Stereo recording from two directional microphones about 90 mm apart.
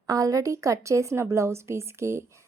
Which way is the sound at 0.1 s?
40° right (ahead or behind).